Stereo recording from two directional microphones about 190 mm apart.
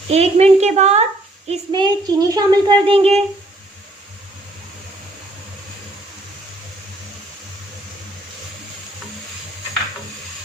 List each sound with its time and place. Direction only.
0.1 s a woman's voice: 35° right (ahead or behind)
1.5 s a woman's voice: 25° right (ahead or behind)